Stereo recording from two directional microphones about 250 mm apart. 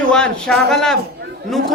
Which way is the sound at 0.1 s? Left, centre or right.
Centre.